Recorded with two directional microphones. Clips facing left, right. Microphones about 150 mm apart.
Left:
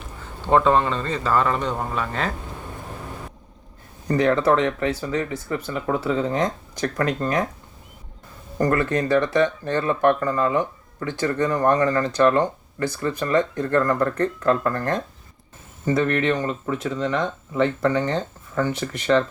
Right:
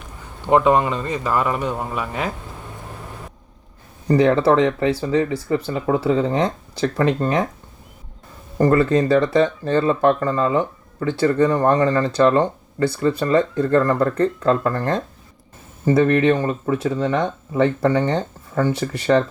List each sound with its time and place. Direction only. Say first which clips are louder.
0.4 s speech: right 2 dB; 15° right (ahead or behind)
4.1 s speech: right 4 dB; 30° right (ahead or behind)
8.5 s speech: right 5 dB; 25° right (ahead or behind)